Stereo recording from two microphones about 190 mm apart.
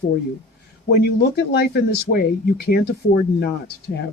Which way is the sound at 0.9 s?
60° left (ahead or behind).